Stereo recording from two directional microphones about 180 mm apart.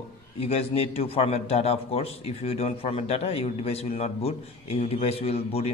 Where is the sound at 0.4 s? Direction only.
35° left (ahead or behind).